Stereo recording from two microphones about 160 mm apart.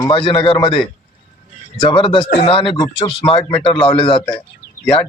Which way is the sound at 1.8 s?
30° left (ahead or behind).